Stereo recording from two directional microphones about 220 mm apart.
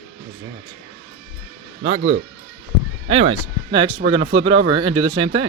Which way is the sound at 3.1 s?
25° right (ahead or behind).